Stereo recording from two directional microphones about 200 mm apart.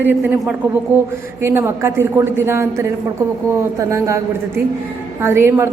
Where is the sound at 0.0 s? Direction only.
5° right (ahead or behind).